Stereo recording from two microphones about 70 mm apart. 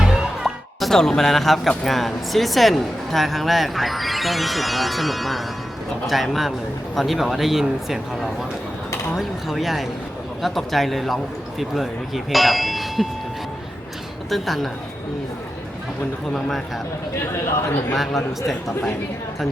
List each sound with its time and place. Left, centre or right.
0.0 s speech: centre
14.3 s speech: centre
17.3 s a man's voice: left
17.9 s speech: centre